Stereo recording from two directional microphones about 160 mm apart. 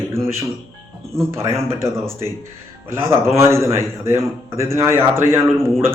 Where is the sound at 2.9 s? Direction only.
15° right (ahead or behind).